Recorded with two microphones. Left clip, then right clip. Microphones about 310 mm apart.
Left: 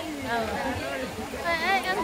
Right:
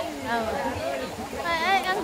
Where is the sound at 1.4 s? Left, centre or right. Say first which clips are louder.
Right 2 dB; centre.